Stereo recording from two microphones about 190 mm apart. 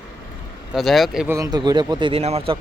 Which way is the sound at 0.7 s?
Centre (ahead or behind).